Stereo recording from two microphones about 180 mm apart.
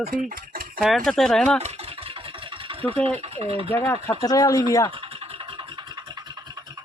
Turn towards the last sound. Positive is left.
turn(degrees=-25)  # may be behind; listen again after turning